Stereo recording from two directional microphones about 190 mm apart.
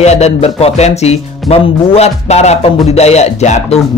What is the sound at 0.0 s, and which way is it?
Speech, 35° left (ahead or behind).